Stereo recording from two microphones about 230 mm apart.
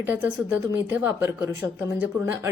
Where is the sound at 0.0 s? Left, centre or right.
Centre.